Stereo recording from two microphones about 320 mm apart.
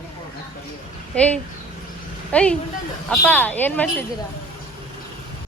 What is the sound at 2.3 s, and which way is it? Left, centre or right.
A woman's voice, centre.